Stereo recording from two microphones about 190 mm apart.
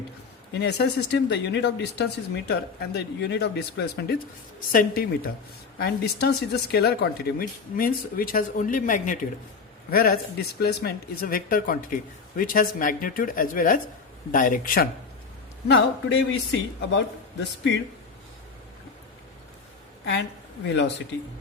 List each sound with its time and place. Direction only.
0.6 s speech: 60° left (ahead or behind)
4.7 s speech: 45° left (ahead or behind)
5.8 s speech: 60° left (ahead or behind)
15.6 s speech: 70° left (ahead or behind)
20.7 s speech: 70° left (ahead or behind)